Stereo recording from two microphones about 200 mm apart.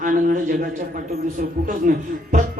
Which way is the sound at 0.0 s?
40° right (ahead or behind).